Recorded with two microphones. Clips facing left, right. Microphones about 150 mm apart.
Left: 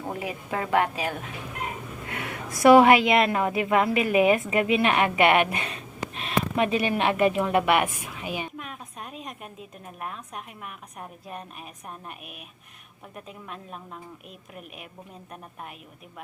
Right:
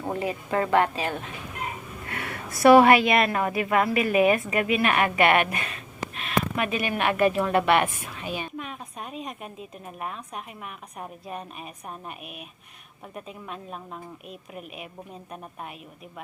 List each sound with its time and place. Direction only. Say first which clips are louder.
0.1 s a woman's voice: right 5 dB; 5° left (ahead or behind)
8.5 s a woman's voice: right 3 dB; centre (ahead or behind)